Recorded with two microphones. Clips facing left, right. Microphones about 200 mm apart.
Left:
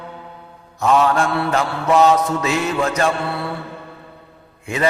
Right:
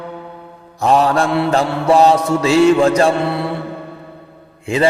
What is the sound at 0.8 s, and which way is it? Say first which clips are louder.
Mantra: right 2 dB; 35° right (ahead or behind).